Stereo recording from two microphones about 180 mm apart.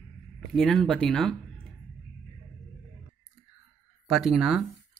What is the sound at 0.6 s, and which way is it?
Speech, centre (ahead or behind).